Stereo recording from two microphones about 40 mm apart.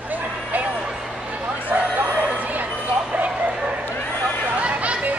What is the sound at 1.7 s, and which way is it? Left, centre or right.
Bow-wow, right.